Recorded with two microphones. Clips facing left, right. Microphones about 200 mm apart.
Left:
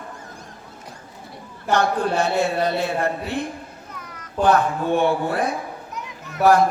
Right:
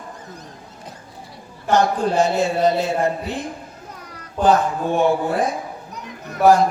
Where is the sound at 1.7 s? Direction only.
60° left (ahead or behind).